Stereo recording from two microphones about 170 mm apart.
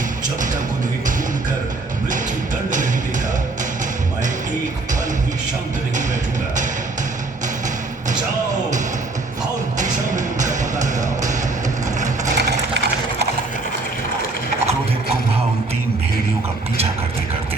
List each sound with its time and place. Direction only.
2.6 s music: 50° right (ahead or behind)
9.7 s music: 45° right (ahead or behind)
12.4 s sewing machine: 80° right